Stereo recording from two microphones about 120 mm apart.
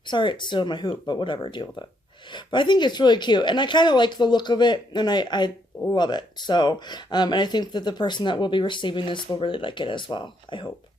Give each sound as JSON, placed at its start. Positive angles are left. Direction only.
{"t": 0.1, "sound": "speech", "side_deg": 40}